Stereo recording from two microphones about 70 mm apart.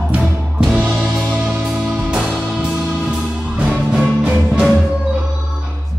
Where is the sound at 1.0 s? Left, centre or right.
Centre.